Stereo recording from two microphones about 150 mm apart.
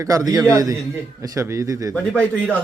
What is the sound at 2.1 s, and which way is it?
Speech, 10° left (ahead or behind).